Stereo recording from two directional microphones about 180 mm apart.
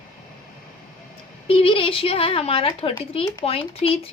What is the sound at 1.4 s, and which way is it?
A woman's voice, 30° left (ahead or behind).